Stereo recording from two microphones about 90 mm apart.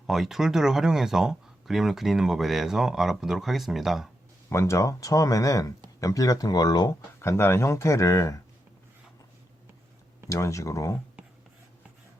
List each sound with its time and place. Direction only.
0.1 s speech: 5° right (ahead or behind)
4.4 s speech: 35° left (ahead or behind)
7.2 s speech: 30° left (ahead or behind)
10.2 s speech: 35° left (ahead or behind)